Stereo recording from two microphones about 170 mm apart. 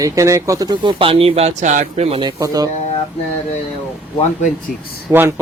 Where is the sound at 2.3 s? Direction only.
20° right (ahead or behind).